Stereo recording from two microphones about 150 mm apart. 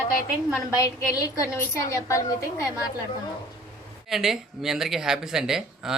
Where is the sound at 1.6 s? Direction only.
20° left (ahead or behind).